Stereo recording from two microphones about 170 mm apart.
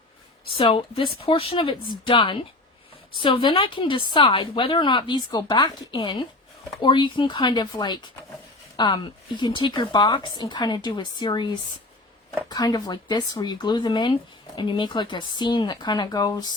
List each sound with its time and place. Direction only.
0.5 s a woman's voice: 30° left (ahead or behind)